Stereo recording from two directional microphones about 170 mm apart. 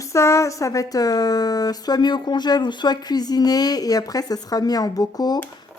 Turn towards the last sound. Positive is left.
turn(degrees=20)  # may be behind; listen again after turning